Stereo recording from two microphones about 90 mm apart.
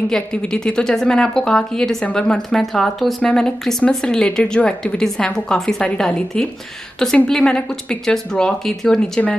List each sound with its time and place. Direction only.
0.1 s speech: 10° left (ahead or behind)